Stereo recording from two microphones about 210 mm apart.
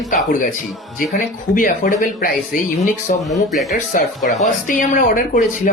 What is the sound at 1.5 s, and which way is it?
Speech, 40° left (ahead or behind).